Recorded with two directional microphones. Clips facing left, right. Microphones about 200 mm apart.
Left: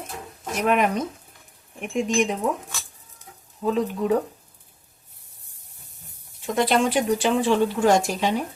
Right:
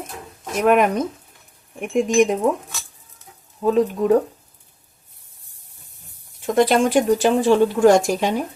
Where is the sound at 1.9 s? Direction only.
45° right (ahead or behind).